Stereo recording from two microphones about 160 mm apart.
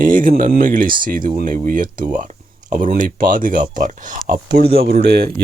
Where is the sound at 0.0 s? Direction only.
60° right (ahead or behind).